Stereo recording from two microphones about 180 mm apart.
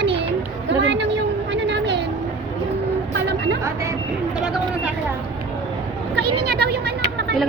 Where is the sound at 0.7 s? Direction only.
80° right.